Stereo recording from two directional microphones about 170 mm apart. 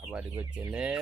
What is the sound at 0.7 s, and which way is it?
Fowl, 5° right (ahead or behind).